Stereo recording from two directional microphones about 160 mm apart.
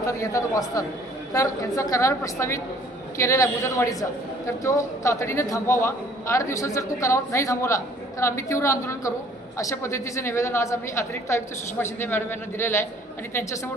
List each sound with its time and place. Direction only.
0.0 s a woman's voice: 20° left (ahead or behind)